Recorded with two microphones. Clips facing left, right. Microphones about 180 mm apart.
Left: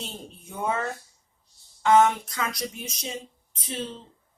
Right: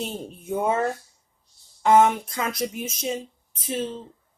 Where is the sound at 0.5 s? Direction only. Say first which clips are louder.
Right 6 dB; 30° right (ahead or behind).